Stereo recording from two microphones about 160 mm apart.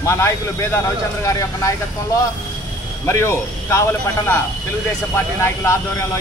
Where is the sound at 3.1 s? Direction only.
15° left (ahead or behind).